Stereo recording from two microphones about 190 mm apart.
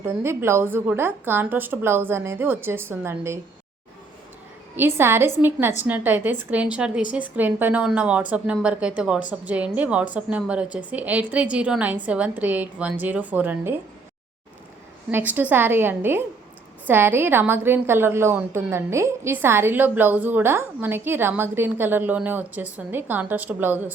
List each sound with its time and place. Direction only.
0.0 s a woman's voice: 15° right (ahead or behind)
4.8 s a woman's voice: 10° right (ahead or behind)
15.1 s a woman's voice: 10° right (ahead or behind)